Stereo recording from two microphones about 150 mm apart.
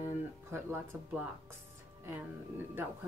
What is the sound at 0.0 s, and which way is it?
Guitar, 15° right (ahead or behind).